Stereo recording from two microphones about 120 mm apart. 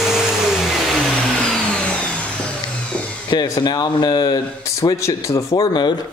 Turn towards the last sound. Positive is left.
turn(degrees=40)  # may be behind; listen again after turning